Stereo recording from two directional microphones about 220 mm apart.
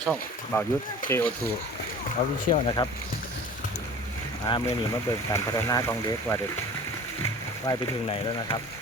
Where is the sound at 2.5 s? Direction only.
20° left (ahead or behind).